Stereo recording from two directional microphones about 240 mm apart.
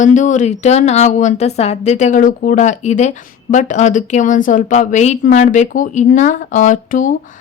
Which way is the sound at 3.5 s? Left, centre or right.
Left.